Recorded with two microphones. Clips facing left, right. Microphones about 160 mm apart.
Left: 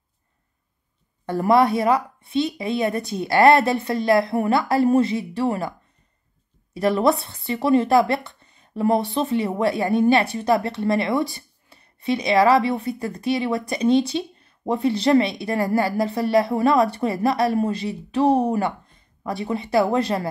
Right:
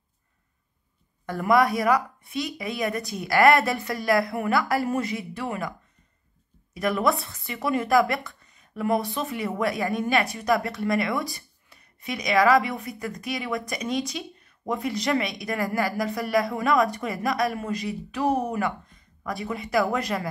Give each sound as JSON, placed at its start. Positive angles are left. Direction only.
{"t": 1.2, "sound": "speech", "side_deg": 30}